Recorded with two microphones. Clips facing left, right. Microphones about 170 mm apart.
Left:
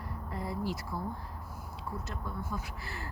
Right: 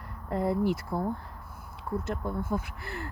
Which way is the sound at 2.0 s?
55° right (ahead or behind).